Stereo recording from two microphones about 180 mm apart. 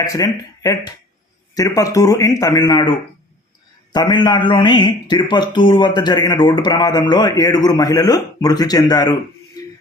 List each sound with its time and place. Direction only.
0.0 s a man's voice: 20° left (ahead or behind)
3.9 s a man's voice: 25° left (ahead or behind)
9.6 s shuffle: 20° left (ahead or behind)